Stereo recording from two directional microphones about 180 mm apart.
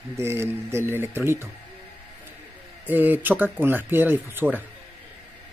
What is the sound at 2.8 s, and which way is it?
Speech, 10° right (ahead or behind).